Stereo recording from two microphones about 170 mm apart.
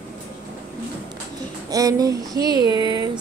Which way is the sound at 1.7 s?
20° right (ahead or behind).